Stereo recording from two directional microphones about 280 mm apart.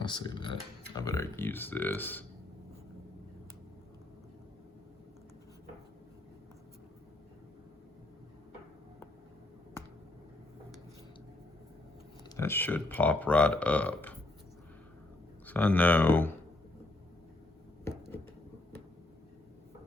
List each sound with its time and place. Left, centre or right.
0.0 s speech: centre
12.4 s speech: centre
15.4 s speech: centre